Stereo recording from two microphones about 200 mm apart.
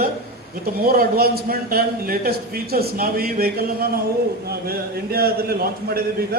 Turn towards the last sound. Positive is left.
turn(degrees=-50)  # may be behind; listen again after turning